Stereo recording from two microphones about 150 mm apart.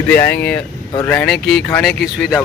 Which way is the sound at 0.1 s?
15° left (ahead or behind).